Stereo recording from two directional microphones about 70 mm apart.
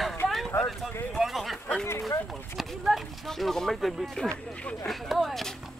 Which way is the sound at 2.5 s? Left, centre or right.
Centre.